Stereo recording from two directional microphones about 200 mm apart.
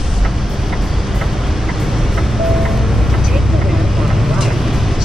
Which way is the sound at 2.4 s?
Centre (ahead or behind).